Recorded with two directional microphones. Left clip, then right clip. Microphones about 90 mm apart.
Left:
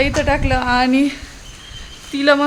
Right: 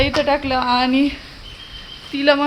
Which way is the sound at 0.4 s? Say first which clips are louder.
Left 1 dB; 35° left (ahead or behind).